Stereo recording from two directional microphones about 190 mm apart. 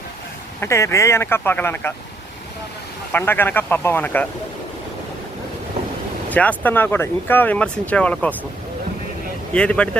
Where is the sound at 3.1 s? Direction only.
10° left (ahead or behind).